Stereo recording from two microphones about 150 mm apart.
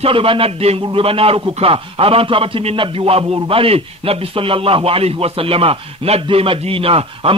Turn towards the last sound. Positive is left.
turn(degrees=-40)  # may be behind; listen again after turning